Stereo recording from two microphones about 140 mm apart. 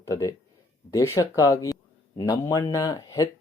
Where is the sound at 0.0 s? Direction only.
25° left (ahead or behind).